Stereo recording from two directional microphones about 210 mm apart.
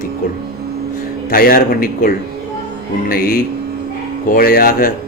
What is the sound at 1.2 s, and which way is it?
Speech, 45° left (ahead or behind).